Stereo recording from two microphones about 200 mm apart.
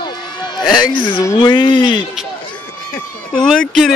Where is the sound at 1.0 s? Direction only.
25° left (ahead or behind).